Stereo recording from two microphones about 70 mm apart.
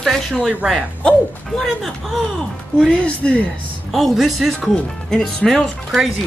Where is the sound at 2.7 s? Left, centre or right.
Centre.